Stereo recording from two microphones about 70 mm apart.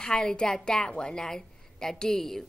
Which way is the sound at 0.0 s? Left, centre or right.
Centre.